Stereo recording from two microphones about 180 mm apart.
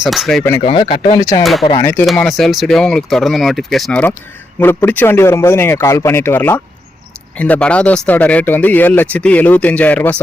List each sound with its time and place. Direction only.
0.0 s speech: centre (ahead or behind)
0.6 s speech: 30° left (ahead or behind)
1.2 s speech: 20° left (ahead or behind)
1.8 s speech: 10° left (ahead or behind)